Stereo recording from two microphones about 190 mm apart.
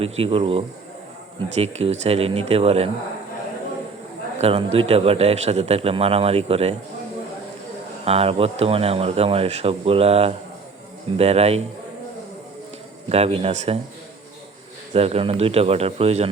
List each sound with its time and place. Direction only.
0.0 s a man's voice: 30° right (ahead or behind)
4.4 s a man's voice: 35° right (ahead or behind)
8.0 s a man's voice: 30° right (ahead or behind)
13.1 s a man's voice: 35° right (ahead or behind)
14.9 s a man's voice: 30° right (ahead or behind)